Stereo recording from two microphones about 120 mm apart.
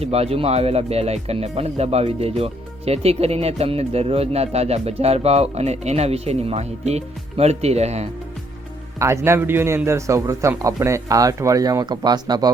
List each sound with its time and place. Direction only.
0.0 s speech: 60° right (ahead or behind)
9.0 s speech: 25° right (ahead or behind)